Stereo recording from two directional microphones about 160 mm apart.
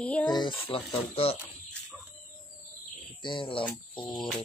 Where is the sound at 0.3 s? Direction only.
30° left (ahead or behind).